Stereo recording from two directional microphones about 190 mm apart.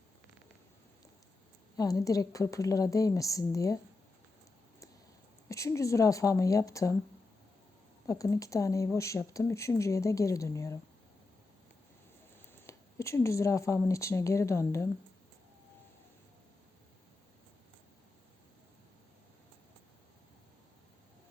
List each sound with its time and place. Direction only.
1.7 s speech: 20° left (ahead or behind)
5.5 s speech: 15° left (ahead or behind)
8.0 s speech: 15° left (ahead or behind)
12.5 s speech: 15° left (ahead or behind)